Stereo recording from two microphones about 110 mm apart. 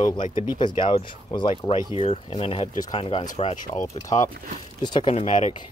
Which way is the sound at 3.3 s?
65° left (ahead or behind).